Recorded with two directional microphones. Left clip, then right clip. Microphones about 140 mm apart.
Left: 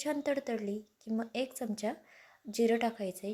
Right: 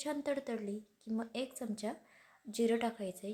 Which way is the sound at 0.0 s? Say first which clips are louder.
Left 4 dB; 15° left (ahead or behind).